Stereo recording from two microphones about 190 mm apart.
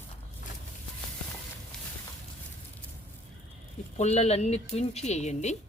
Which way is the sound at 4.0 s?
35° left (ahead or behind).